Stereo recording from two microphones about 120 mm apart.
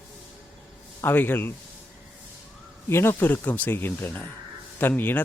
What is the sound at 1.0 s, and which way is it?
Speech, 15° left (ahead or behind).